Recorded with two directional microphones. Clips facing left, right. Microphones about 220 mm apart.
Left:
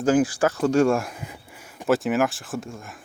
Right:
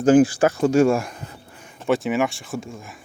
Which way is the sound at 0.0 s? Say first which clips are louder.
Right 5 dB; 25° right (ahead or behind).